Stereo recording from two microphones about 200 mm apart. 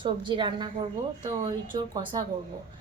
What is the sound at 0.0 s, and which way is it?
A woman's voice, 25° right (ahead or behind).